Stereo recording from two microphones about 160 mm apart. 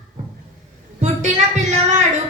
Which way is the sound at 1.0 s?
45° right (ahead or behind).